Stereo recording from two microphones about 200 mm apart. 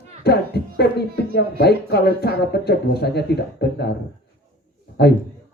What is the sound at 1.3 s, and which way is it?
Speech, 55° left (ahead or behind).